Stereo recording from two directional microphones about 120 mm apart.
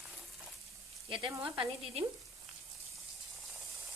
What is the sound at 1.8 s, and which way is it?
Speech, 55° right (ahead or behind).